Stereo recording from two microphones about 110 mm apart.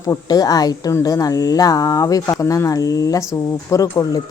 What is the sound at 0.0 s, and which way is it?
Speech, 35° left (ahead or behind).